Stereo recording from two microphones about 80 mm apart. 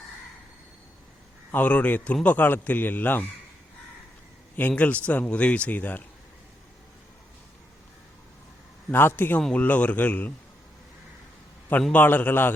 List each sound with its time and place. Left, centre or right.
1.5 s a man's voice: centre
4.7 s speech: centre
8.9 s a man's voice: left
11.9 s a man's voice: left